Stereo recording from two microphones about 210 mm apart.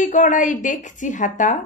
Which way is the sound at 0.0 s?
35° left (ahead or behind).